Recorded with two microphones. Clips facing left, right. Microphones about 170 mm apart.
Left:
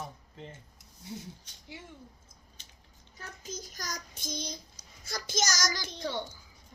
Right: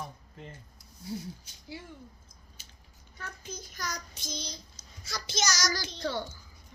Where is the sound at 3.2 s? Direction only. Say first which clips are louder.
Even; 40° left (ahead or behind).